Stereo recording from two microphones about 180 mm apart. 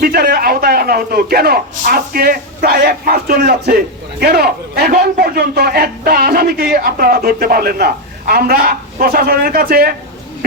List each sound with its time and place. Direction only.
0.0 s a man's voice: 55° right (ahead or behind)